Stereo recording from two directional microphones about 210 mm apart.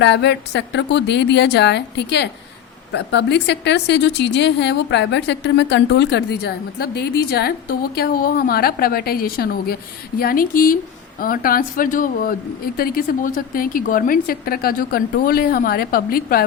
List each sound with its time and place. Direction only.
0.0 s a woman's voice: 55° left (ahead or behind)